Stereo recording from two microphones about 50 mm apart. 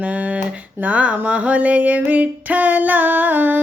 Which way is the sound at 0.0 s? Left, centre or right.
Right.